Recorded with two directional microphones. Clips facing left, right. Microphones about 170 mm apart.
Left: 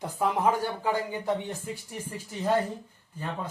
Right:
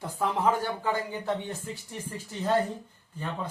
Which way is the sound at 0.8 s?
10° left (ahead or behind).